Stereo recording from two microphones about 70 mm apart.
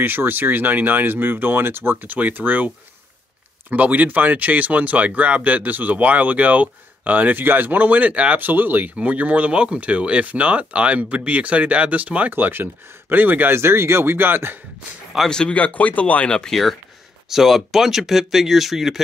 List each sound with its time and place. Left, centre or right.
0.0 s speech: right
3.7 s a man's voice: right
15.2 s speech: centre